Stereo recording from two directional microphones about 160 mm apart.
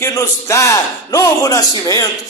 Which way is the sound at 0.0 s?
20° left (ahead or behind).